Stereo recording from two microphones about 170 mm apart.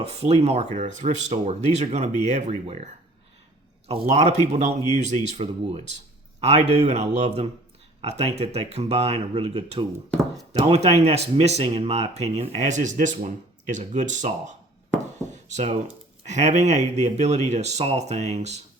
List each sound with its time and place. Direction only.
0.0 s speech: 35° right (ahead or behind)
16.2 s a man's voice: 45° right (ahead or behind)